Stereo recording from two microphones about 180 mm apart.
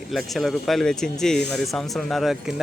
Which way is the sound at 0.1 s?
Centre (ahead or behind).